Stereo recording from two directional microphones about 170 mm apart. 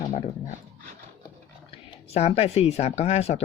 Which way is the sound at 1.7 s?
35° left (ahead or behind).